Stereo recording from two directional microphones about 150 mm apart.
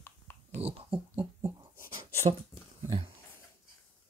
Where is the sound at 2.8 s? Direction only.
40° right (ahead or behind).